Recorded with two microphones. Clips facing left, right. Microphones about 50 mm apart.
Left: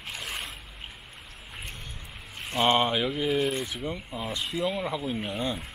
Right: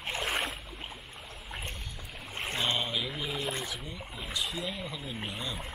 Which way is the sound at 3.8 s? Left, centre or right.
Left.